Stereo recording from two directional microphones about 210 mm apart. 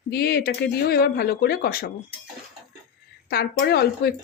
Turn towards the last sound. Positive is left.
turn(degrees=50)  # may be behind; listen again after turning